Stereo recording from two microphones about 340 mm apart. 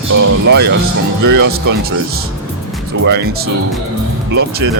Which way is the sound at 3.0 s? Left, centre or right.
Right.